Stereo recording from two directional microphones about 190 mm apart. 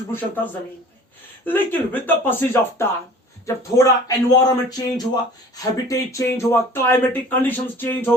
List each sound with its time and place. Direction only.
0.1 s speech: 10° left (ahead or behind)
1.5 s speech: 10° left (ahead or behind)